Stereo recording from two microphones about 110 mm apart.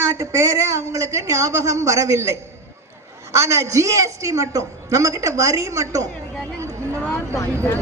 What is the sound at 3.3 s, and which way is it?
A woman's voice, 25° right (ahead or behind).